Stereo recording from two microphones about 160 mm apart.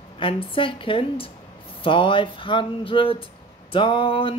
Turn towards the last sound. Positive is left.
turn(degrees=30)  # may be behind; listen again after turning